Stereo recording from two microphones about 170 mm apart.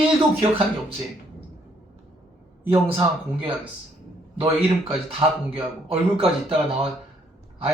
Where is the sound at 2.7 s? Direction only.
15° right (ahead or behind).